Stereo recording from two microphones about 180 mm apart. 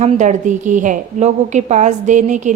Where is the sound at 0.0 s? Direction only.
40° right (ahead or behind).